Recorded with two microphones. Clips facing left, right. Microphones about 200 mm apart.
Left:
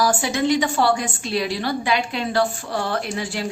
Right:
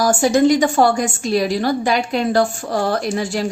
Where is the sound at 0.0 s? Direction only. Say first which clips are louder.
Right 7 dB; 45° right (ahead or behind).